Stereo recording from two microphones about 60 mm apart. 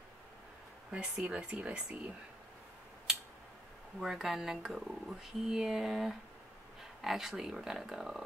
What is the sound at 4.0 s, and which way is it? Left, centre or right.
Speech, centre.